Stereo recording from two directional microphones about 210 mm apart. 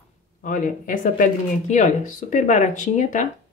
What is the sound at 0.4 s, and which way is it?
Speech, 40° left (ahead or behind).